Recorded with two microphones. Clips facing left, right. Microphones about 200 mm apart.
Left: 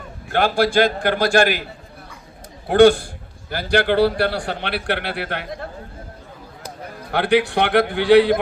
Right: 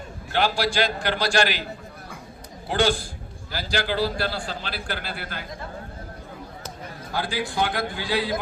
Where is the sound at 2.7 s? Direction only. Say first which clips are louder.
Left 11 dB; 60° left (ahead or behind).